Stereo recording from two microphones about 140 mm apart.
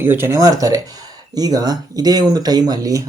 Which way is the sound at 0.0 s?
15° right (ahead or behind).